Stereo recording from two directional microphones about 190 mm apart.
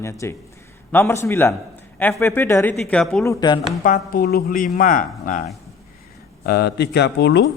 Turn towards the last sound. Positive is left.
turn(degrees=65)  # may be behind; listen again after turning